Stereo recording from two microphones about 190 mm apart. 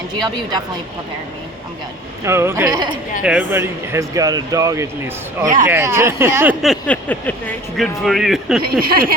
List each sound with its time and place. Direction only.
0.1 s speech: 20° right (ahead or behind)
2.2 s speech: 15° right (ahead or behind)
3.2 s speech: 10° right (ahead or behind)
8.6 s speech: 50° right (ahead or behind)